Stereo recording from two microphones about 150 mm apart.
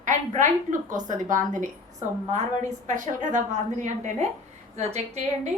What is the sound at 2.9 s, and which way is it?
A woman's voice, 55° right (ahead or behind).